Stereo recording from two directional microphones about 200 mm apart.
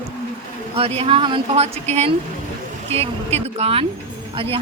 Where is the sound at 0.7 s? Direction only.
30° right (ahead or behind).